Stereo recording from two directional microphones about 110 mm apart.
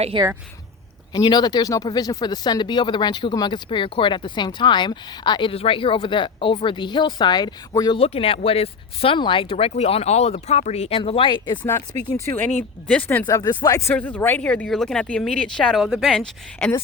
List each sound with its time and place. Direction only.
0.1 s speech: 45° right (ahead or behind)
1.1 s speech: 40° left (ahead or behind)
5.5 s speech: 60° left (ahead or behind); by 7.9 s 40° left (ahead or behind)
7.9 s speech: 60° left (ahead or behind)
12.9 s speech: 15° left (ahead or behind)
13.2 s speech: 35° left (ahead or behind)
13.7 s speech: 25° left (ahead or behind); by 16.3 s 5° left (ahead or behind)
16.6 s speech: 20° left (ahead or behind)